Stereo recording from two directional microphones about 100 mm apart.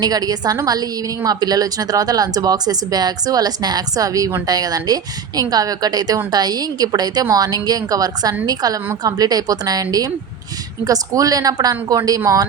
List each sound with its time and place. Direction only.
0.0 s a woman's voice: 40° right (ahead or behind)